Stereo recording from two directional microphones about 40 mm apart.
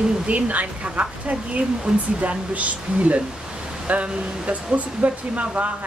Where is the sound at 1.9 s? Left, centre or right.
Centre.